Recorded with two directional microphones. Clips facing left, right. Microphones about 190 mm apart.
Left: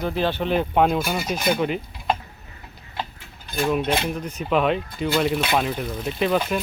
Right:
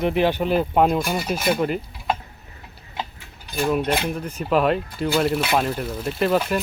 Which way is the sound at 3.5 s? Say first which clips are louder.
Right 1 dB; 5° right (ahead or behind).